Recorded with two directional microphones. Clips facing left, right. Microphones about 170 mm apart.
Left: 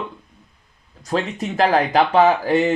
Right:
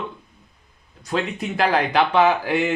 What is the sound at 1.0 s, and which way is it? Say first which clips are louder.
Speech: left 2 dB; 40° left (ahead or behind).